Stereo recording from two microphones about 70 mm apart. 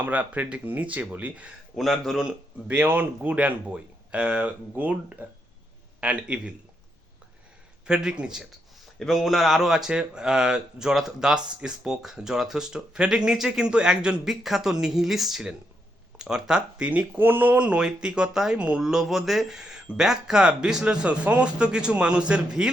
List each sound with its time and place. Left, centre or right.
0.0 s speech: right
1.7 s speech: centre
2.2 s speech: right
7.9 s speech: centre
9.0 s speech: centre
17.2 s speech: right
18.8 s speech: centre